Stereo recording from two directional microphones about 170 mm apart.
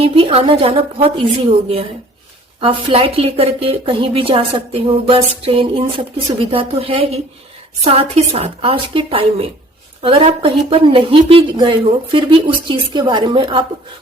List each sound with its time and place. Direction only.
0.0 s a woman's voice: 35° right (ahead or behind)